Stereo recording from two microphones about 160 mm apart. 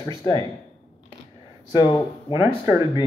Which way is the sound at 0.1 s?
25° left (ahead or behind).